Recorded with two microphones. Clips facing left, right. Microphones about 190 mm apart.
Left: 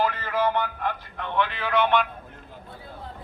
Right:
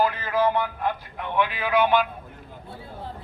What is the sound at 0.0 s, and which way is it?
Speech, 10° right (ahead or behind).